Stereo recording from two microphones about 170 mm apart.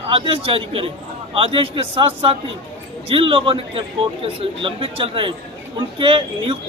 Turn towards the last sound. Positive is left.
turn(degrees=-30)  # may be behind; listen again after turning